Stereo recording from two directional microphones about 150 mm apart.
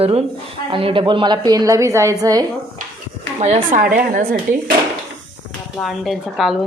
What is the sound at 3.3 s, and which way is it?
Speech, 45° right (ahead or behind).